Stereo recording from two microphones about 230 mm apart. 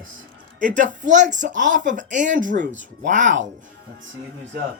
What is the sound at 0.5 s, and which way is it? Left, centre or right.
A child's voice, right.